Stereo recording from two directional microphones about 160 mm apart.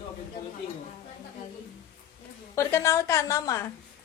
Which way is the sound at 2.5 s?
15° left (ahead or behind).